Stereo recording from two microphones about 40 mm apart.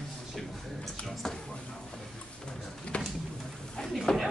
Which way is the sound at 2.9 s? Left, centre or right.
Left.